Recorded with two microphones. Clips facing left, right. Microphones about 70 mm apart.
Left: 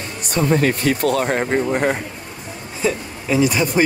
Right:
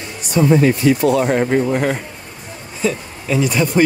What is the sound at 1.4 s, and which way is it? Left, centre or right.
Speech, centre.